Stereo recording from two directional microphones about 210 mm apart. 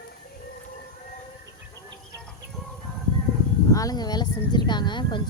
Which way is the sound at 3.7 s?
15° left (ahead or behind).